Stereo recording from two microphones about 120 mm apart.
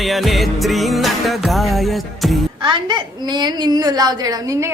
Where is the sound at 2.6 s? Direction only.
40° right (ahead or behind).